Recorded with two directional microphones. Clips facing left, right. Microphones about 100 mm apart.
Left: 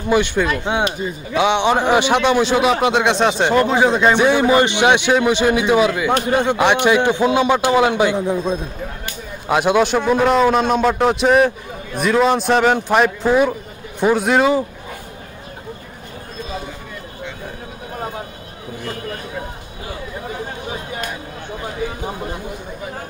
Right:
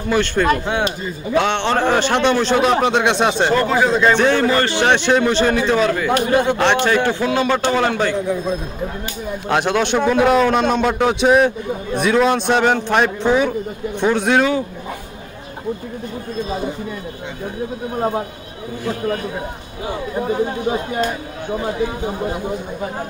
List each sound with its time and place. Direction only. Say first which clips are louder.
0.1 s a man's voice: even; 10° left (ahead or behind)
3.4 s a man's voice: left 3 dB; 20° left (ahead or behind)
9.5 s a man's voice: left 2 dB; 5° left (ahead or behind)